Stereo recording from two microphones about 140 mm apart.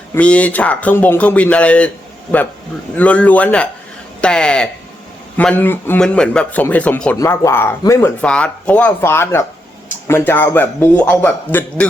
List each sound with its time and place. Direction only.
0.1 s a man's voice: 10° left (ahead or behind)
2.9 s a man's voice: 10° left (ahead or behind)
8.2 s a man's voice: 10° left (ahead or behind)